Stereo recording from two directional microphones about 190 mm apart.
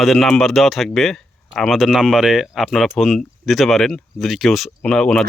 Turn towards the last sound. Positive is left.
turn(degrees=5)  # may be behind; listen again after turning